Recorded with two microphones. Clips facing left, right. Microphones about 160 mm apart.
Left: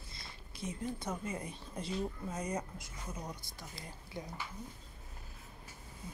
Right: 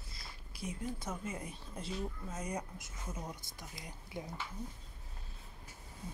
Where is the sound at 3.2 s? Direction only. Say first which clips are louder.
Left 1 dB; 20° right (ahead or behind).